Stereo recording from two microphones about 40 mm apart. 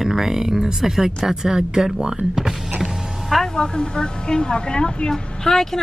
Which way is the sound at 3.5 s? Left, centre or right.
Left.